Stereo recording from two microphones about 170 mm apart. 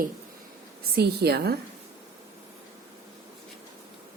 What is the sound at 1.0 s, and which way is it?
Speech, 70° right (ahead or behind).